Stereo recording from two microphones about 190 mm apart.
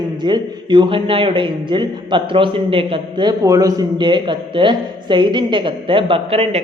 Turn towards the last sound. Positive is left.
turn(degrees=-30)  # may be behind; listen again after turning